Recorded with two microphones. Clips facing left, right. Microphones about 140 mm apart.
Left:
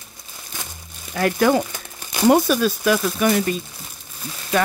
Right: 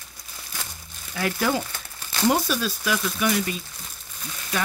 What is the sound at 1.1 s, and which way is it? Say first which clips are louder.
Speech: left 7 dB; 55° left (ahead or behind).